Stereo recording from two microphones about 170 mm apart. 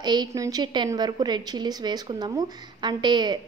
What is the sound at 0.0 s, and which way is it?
A woman's voice, 25° right (ahead or behind).